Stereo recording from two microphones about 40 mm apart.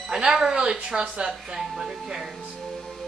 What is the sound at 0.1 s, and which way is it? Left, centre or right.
Speech, centre.